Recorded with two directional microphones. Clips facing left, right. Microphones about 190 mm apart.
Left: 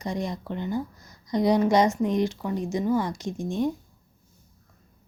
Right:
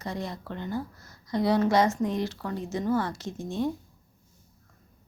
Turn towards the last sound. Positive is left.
turn(degrees=15)  # may be behind; listen again after turning